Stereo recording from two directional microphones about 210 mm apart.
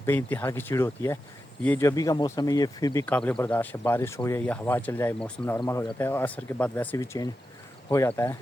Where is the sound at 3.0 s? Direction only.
5° left (ahead or behind).